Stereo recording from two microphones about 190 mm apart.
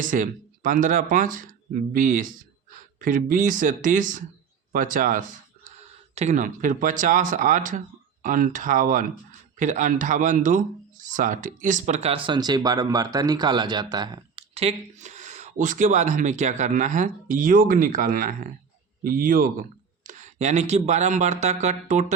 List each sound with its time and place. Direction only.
0.0 s speech: 45° right (ahead or behind); by 14.4 s 20° right (ahead or behind)
14.5 s speech: 35° right (ahead or behind)